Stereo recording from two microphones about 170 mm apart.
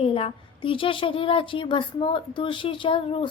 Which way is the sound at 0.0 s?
35° left (ahead or behind).